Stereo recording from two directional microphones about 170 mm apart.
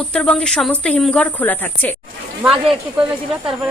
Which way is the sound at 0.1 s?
5° left (ahead or behind).